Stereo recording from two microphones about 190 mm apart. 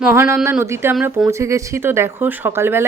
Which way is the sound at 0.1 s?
15° right (ahead or behind).